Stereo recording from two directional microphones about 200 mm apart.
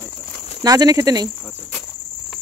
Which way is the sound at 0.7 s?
20° right (ahead or behind).